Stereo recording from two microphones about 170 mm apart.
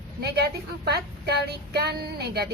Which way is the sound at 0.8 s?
70° right (ahead or behind).